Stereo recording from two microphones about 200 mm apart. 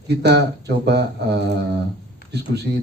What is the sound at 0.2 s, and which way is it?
Speech, 60° right (ahead or behind).